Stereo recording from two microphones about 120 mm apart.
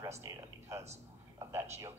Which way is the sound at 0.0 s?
25° right (ahead or behind).